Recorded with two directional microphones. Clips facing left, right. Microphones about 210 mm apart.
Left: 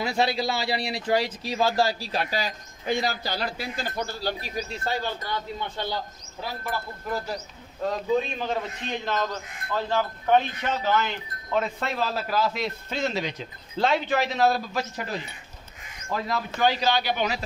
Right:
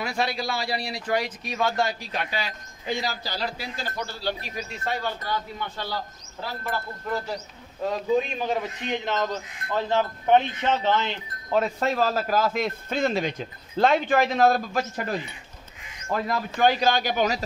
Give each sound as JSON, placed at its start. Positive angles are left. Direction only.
{"t": 0.0, "sound": "speech", "side_deg": 25}
{"t": 5.8, "sound": "speech", "side_deg": 20}
{"t": 7.9, "sound": "a man's voice", "side_deg": -10}
{"t": 9.8, "sound": "wind chime", "side_deg": -20}